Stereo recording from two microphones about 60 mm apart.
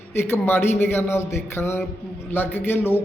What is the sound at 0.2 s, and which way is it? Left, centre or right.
A man's voice, left.